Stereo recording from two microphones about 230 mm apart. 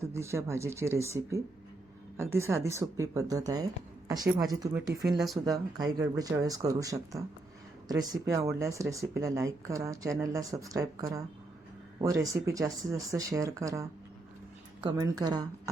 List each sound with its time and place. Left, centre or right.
0.0 s speech: centre
5.1 s speech: centre
5.5 s speech: centre
14.8 s speech: centre